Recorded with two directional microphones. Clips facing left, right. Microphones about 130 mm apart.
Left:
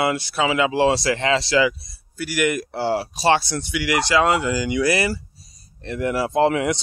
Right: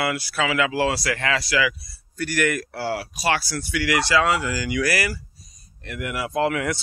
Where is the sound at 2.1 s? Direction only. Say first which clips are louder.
Left 1 dB; 10° left (ahead or behind).